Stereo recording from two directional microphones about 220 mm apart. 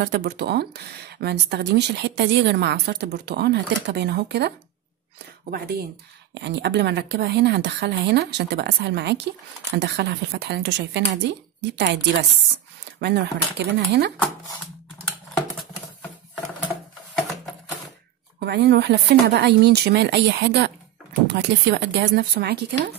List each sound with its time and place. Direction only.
0.0 s speech: 50° right (ahead or behind)
6.3 s speech: 50° right (ahead or behind)
18.4 s speech: 50° right (ahead or behind)